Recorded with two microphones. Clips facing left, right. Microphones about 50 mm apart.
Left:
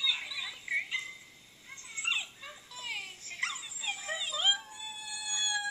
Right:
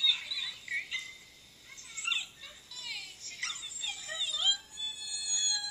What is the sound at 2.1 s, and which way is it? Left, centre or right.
Dog, left.